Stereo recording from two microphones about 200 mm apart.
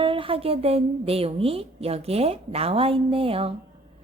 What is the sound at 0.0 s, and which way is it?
A woman's voice, 25° right (ahead or behind).